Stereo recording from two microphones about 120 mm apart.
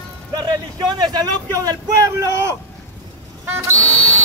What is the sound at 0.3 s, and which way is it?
Speech, 35° right (ahead or behind).